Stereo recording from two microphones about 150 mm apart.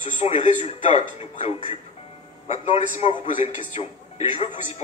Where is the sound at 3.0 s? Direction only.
35° left (ahead or behind).